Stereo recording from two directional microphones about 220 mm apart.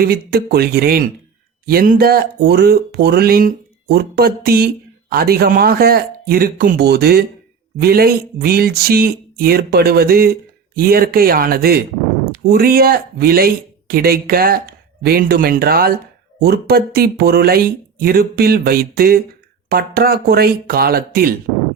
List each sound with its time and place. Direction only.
0.0 s speech: 45° right (ahead or behind)